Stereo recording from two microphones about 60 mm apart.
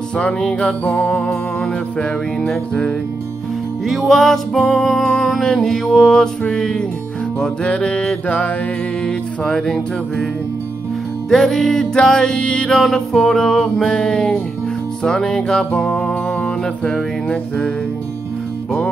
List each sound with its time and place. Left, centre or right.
0.2 s music: centre
0.6 s music: left
3.8 s music: centre; by 8.5 s left
9.0 s music: centre
11.2 s music: centre